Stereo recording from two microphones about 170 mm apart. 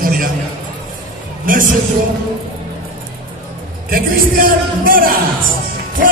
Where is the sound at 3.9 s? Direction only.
55° right (ahead or behind).